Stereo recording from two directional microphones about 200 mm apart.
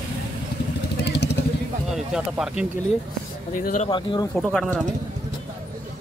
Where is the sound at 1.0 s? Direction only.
55° left (ahead or behind).